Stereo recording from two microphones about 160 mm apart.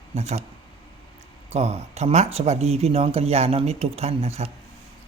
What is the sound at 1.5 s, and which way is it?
Speech, 40° right (ahead or behind).